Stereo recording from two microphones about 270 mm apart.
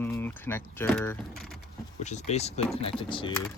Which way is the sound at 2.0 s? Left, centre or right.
Left.